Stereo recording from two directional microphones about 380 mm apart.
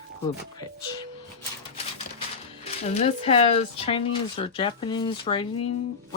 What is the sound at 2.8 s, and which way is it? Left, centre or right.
Speech, centre.